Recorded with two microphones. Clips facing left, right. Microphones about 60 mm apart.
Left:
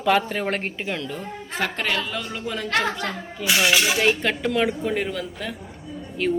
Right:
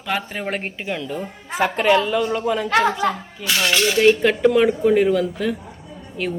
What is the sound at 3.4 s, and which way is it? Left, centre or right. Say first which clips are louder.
Speech: even; centre.